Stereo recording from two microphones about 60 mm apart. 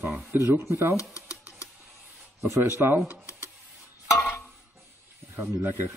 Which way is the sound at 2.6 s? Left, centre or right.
Right.